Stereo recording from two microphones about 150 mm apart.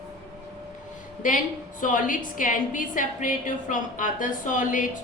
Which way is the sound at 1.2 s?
60° left (ahead or behind).